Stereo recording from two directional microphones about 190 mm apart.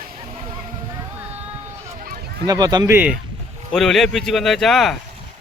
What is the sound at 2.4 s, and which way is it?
Speech, 20° right (ahead or behind).